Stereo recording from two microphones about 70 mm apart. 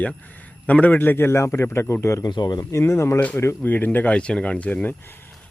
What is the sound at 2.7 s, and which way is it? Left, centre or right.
Speech, left.